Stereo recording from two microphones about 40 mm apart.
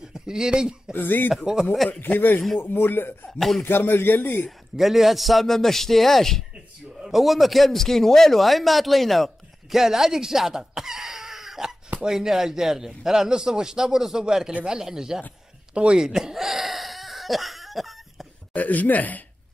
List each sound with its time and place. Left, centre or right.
0.1 s speech: centre
0.9 s speech: left
1.4 s a man's voice: centre
2.0 s speech: left
2.6 s speech: left
3.3 s a man's voice: centre
3.6 s speech: left
4.5 s a man's voice: centre
7.0 s a man's voice: centre
15.7 s speech: right
16.0 s a sound: centre
18.5 s speech: left